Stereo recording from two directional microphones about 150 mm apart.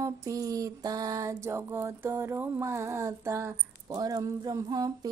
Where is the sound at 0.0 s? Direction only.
20° right (ahead or behind).